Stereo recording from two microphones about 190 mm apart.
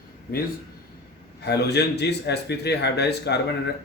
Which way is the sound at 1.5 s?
60° left (ahead or behind).